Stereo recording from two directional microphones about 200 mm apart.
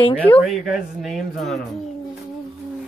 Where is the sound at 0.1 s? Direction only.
5° left (ahead or behind).